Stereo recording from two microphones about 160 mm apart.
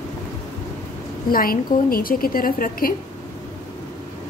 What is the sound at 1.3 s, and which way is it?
A woman's voice, 65° left (ahead or behind).